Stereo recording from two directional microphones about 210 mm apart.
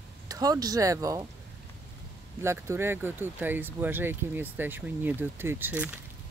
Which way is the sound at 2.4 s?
10° right (ahead or behind).